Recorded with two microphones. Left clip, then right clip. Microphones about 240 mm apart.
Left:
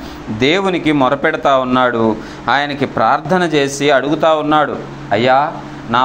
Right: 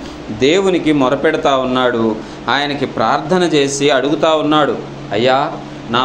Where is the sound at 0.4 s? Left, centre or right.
Left.